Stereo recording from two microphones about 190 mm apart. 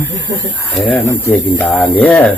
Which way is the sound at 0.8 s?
10° left (ahead or behind).